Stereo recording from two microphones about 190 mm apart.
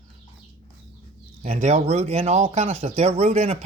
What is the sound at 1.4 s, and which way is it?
Speech, 35° right (ahead or behind).